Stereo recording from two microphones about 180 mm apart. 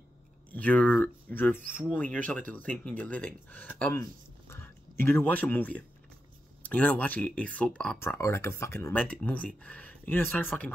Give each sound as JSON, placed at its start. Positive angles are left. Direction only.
{"t": 0.5, "sound": "speech", "side_deg": 10}
{"t": 1.6, "sound": "speech", "side_deg": -50}
{"t": 1.9, "sound": "speech", "side_deg": 10}